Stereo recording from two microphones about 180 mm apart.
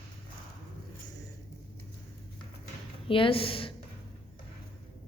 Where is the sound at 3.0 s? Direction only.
30° left (ahead or behind).